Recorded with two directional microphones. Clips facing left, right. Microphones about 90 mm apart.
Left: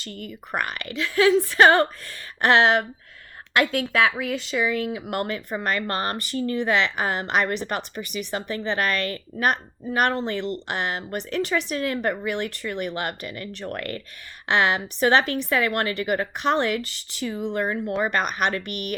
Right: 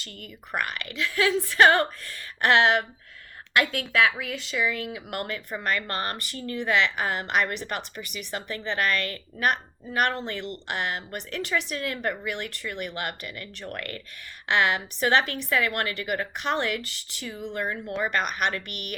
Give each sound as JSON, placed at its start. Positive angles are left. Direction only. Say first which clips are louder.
{"t": 0.5, "sound": "speech", "louder": "left 2 dB", "side_deg": 30}